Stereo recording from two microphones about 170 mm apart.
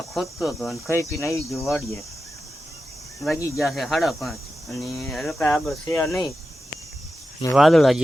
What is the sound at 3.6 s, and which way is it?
Speech, centre (ahead or behind).